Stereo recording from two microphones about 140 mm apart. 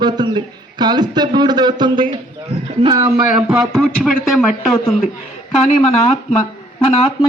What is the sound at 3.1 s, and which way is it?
Speech, 5° right (ahead or behind).